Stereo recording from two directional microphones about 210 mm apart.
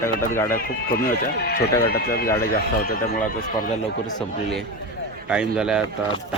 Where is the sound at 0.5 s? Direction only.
45° left (ahead or behind).